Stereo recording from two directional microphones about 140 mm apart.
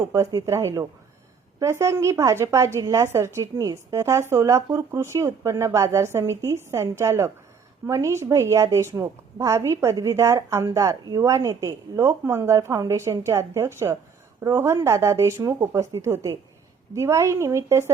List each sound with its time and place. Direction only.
0.0 s a woman's voice: 20° right (ahead or behind)